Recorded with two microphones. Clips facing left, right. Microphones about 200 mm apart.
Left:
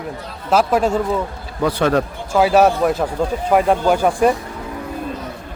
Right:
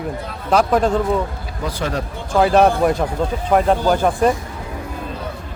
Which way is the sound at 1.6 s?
65° left (ahead or behind).